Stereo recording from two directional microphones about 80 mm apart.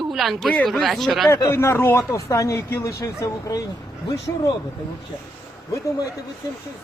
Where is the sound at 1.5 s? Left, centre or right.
Left.